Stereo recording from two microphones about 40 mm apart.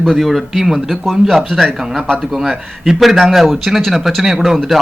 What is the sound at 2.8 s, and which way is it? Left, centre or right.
A man's voice, centre.